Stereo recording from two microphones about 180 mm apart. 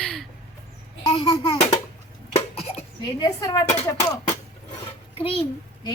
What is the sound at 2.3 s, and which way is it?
Cough, 35° left (ahead or behind).